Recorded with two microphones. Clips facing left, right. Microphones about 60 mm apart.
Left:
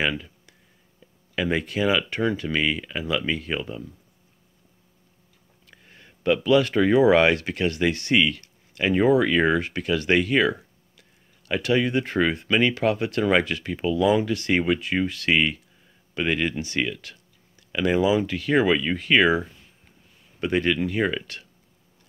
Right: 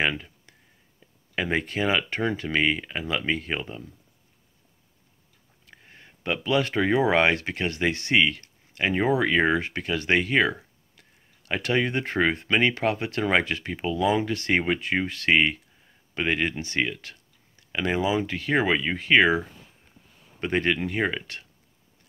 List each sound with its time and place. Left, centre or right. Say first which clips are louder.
1.3 s speech: left 2 dB; right
5.7 s a sound: right 1 dB; right
6.7 s speech: left 3 dB; right